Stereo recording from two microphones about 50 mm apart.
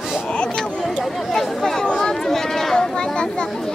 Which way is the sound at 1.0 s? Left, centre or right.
Centre.